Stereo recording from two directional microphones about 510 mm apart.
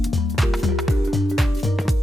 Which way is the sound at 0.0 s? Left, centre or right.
Centre.